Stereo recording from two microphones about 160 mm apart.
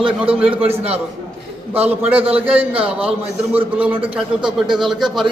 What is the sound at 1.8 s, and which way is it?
Speech, 10° right (ahead or behind).